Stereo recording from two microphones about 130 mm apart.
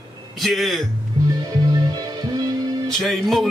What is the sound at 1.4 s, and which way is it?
Music, 30° right (ahead or behind).